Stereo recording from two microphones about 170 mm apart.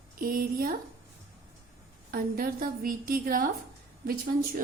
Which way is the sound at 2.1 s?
60° right (ahead or behind).